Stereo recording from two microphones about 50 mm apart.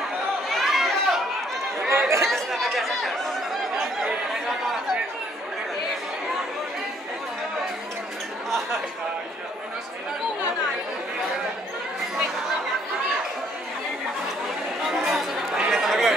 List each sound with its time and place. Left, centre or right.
0.5 s chatter: centre
1.9 s chatter: right
2.2 s chatter: centre
3.8 s a sound: centre
14.9 s chatter: centre
15.7 s a sound: centre